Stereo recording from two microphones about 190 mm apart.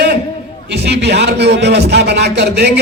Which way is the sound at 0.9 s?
60° right (ahead or behind).